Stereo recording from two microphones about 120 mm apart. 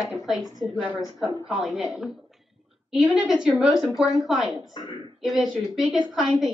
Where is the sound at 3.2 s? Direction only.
5° right (ahead or behind).